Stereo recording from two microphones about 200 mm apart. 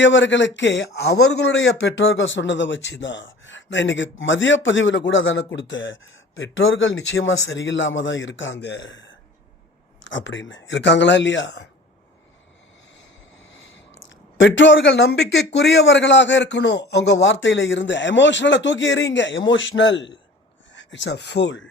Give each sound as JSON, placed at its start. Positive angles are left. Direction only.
{"t": 0.0, "sound": "a man's voice", "side_deg": 65}
{"t": 13.4, "sound": "a sound", "side_deg": 65}
{"t": 15.5, "sound": "a man's voice", "side_deg": 60}